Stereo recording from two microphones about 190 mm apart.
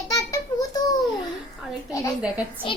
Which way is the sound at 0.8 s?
20° left (ahead or behind).